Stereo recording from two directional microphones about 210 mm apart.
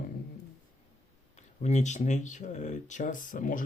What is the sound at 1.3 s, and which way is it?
Speech, 35° left (ahead or behind).